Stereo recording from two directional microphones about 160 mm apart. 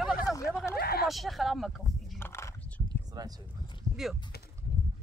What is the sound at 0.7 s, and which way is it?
Speech, 75° left (ahead or behind).